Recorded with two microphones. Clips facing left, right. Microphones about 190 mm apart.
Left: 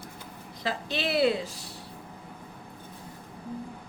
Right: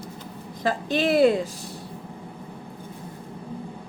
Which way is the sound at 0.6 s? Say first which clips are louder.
Right 8 dB; 50° right (ahead or behind).